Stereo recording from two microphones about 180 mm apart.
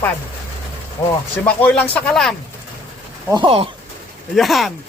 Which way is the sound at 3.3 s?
30° right (ahead or behind).